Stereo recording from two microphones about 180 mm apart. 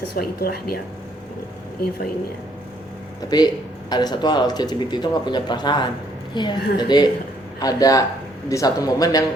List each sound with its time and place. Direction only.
0.2 s a woman's voice: 60° left (ahead or behind)
3.2 s speech: 25° left (ahead or behind)